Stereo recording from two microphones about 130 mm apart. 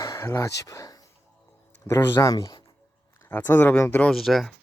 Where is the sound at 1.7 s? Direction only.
20° left (ahead or behind).